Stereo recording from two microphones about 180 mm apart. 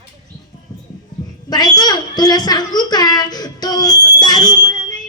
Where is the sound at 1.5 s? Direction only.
20° left (ahead or behind).